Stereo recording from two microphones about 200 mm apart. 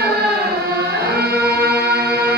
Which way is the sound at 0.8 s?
50° right (ahead or behind).